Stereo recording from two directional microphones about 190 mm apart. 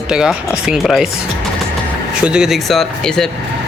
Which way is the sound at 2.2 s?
5° right (ahead or behind).